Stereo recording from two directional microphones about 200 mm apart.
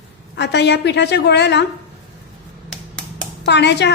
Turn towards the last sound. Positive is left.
turn(degrees=60)  # may be behind; listen again after turning